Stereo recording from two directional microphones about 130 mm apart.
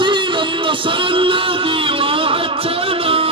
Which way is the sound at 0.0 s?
40° right (ahead or behind).